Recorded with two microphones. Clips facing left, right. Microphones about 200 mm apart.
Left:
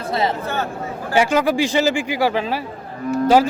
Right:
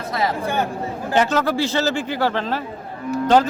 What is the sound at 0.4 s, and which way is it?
Speech, 15° right (ahead or behind).